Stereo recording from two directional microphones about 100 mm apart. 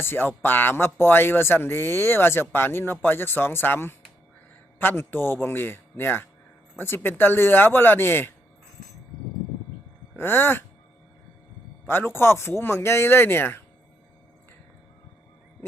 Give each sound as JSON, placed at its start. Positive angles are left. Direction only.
{"t": 0.0, "sound": "speech", "side_deg": 20}
{"t": 10.2, "sound": "speech", "side_deg": 20}
{"t": 11.9, "sound": "speech", "side_deg": 25}